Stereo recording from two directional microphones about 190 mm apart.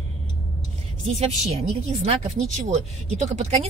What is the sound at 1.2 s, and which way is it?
Speech, 35° right (ahead or behind).